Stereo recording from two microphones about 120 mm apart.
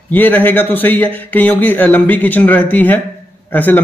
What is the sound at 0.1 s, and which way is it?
A man's voice, 15° left (ahead or behind).